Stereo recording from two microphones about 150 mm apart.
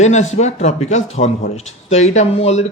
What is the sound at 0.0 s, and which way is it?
A man's voice, 50° left (ahead or behind).